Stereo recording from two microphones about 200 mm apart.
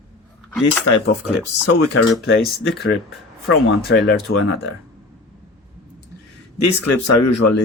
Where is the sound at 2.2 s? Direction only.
80° left.